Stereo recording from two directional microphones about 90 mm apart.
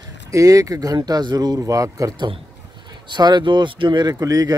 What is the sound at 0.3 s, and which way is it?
Speech, 40° right (ahead or behind).